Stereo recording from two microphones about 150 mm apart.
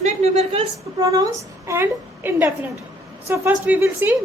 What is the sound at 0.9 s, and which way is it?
A woman's voice, 25° right (ahead or behind).